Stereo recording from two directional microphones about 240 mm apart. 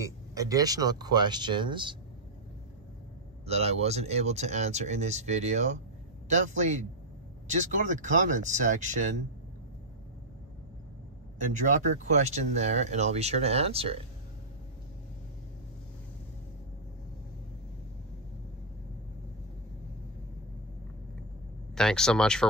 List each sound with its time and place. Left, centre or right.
0.0 s speech: centre
3.4 s speech: right
11.6 s speech: right
21.7 s speech: centre